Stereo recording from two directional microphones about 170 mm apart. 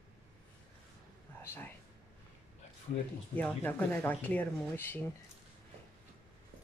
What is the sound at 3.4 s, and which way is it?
Speech, 10° left (ahead or behind).